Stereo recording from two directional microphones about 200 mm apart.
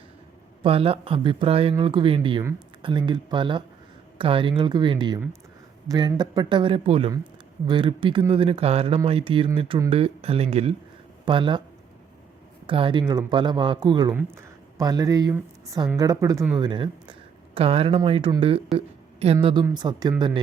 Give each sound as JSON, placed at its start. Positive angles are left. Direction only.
{"t": 0.6, "sound": "speech", "side_deg": -30}
{"t": 12.6, "sound": "speech", "side_deg": -25}